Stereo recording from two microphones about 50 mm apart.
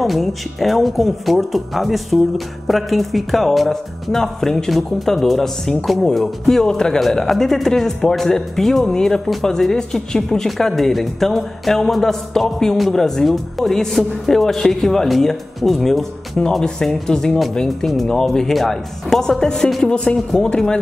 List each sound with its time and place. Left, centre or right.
0.0 s speech: centre